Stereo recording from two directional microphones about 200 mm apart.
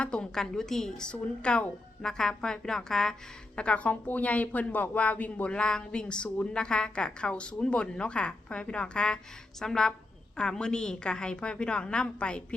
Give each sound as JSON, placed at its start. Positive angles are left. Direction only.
{"t": 0.0, "sound": "speech", "side_deg": 5}